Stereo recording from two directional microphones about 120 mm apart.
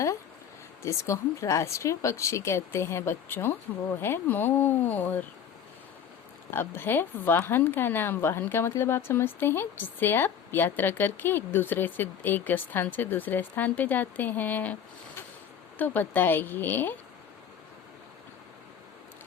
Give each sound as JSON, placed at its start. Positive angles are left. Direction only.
{"t": 0.8, "sound": "speech", "side_deg": 25}
{"t": 6.5, "sound": "speech", "side_deg": 15}